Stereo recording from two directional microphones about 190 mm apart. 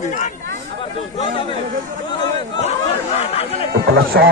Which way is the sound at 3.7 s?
60° right (ahead or behind).